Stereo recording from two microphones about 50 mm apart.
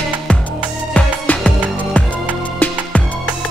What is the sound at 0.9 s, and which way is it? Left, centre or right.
Music, left.